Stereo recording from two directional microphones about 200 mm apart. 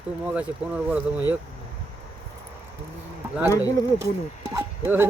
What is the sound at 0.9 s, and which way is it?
Speech, 10° right (ahead or behind).